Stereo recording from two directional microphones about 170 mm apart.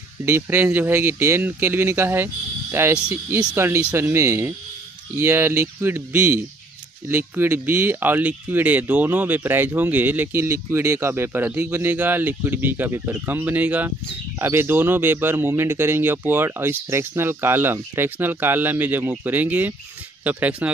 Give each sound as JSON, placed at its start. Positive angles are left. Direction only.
{"t": 0.2, "sound": "speech", "side_deg": -15}